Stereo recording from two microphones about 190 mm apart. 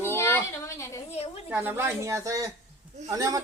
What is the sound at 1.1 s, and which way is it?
Speech, 30° left (ahead or behind).